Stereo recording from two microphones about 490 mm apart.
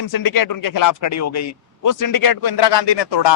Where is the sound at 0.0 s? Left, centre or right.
Left.